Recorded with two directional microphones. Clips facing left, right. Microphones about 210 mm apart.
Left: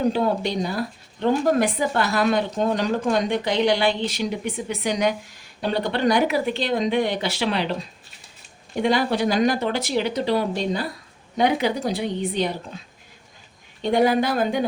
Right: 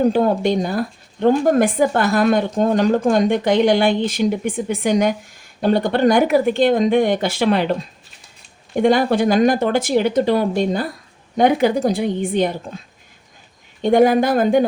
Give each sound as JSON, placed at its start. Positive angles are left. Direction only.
{"t": 0.0, "sound": "speech", "side_deg": -50}
{"t": 13.8, "sound": "speech", "side_deg": -50}